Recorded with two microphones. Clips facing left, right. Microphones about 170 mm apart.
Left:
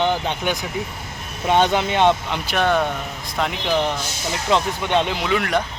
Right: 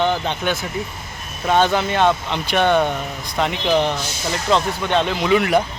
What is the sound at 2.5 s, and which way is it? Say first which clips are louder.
Speech: right 3 dB; centre (ahead or behind).